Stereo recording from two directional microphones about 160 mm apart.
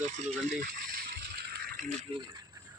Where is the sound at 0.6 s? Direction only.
90° right.